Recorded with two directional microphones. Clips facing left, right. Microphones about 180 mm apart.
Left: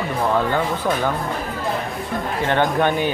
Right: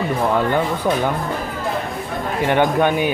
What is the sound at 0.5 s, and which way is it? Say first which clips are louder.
Speech: right 2 dB; 15° right (ahead or behind).